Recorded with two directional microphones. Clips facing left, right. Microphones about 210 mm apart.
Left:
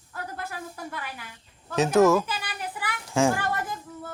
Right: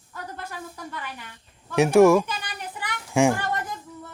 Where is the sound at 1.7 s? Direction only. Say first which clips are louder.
Right 4 dB; 10° right (ahead or behind).